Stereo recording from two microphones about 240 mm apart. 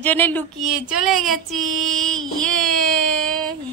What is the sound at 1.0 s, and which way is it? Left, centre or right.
Child singing, centre.